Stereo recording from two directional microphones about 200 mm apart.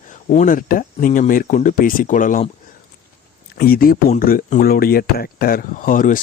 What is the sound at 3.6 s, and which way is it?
Speech, 45° left (ahead or behind).